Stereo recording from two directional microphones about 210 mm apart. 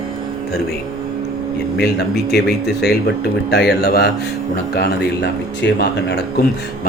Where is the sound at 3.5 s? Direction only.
50° left (ahead or behind).